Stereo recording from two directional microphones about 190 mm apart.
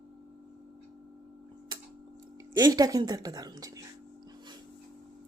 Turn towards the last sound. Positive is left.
turn(degrees=-20)  # may be behind; listen again after turning